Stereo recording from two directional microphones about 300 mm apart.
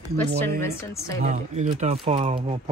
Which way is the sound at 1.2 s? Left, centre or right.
Right.